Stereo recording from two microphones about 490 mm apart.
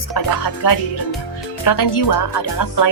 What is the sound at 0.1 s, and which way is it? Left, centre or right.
Music, left.